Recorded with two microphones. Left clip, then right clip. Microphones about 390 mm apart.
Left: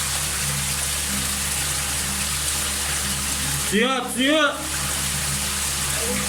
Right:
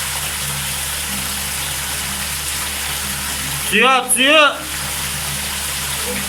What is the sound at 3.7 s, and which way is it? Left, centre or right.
Speech, right.